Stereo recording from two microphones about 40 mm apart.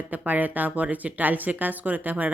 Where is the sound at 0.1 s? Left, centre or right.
Right.